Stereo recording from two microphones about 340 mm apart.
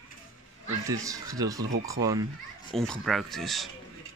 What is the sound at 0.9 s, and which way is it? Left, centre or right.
Speech, centre.